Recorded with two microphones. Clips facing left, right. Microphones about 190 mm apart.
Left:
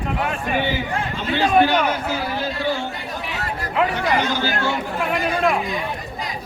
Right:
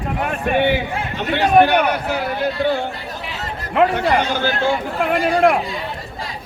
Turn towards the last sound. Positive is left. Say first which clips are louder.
# right 5 dB
turn(degrees=-60)  # may be behind; listen again after turning